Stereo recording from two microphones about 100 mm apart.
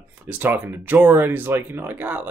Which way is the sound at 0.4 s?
20° right (ahead or behind).